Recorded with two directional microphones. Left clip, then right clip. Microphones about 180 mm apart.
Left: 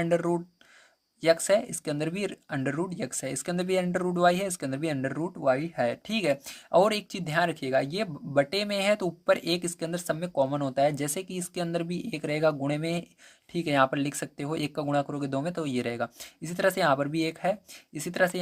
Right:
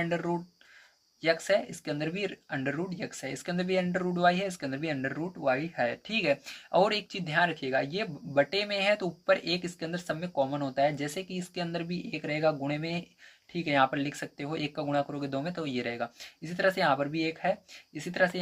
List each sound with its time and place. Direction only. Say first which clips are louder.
0.0 s speech: left 5 dB; 50° left (ahead or behind)